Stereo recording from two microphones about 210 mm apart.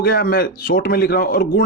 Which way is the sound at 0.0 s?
45° left (ahead or behind).